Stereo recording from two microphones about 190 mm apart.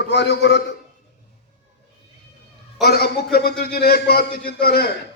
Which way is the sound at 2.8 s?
55° left (ahead or behind).